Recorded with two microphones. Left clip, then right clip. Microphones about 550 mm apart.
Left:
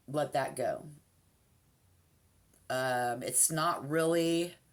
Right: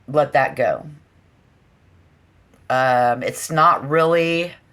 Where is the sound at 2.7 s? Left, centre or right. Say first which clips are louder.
Right 16 dB; centre.